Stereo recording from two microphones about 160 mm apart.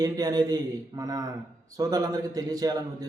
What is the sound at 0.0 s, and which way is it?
A man's voice, 25° right (ahead or behind).